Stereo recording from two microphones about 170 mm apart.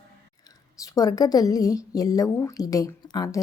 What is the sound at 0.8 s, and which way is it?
A woman's voice, 20° left (ahead or behind).